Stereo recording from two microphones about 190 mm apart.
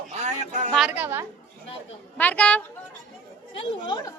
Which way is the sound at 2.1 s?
10° left (ahead or behind).